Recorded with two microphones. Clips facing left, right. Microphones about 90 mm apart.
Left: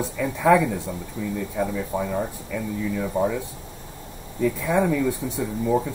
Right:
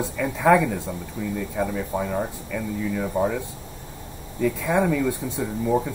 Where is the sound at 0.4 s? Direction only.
50° right (ahead or behind).